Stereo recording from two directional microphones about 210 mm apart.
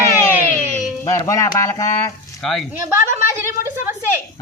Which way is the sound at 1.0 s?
15° left (ahead or behind).